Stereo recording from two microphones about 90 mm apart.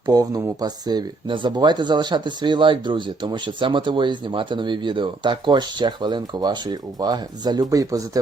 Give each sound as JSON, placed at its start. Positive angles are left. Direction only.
{"t": 0.1, "sound": "speech", "side_deg": -45}
{"t": 1.3, "sound": "speech", "side_deg": -60}